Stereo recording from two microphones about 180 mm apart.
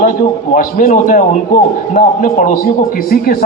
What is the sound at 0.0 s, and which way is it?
A man's voice, 50° left (ahead or behind).